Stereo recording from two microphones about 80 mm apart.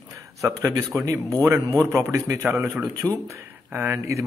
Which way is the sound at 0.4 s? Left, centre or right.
Right.